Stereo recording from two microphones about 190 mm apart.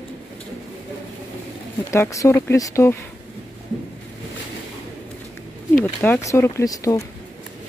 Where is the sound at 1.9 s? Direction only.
15° left (ahead or behind).